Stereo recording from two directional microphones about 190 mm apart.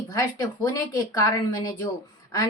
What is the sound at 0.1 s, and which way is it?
A woman's voice, 20° left (ahead or behind).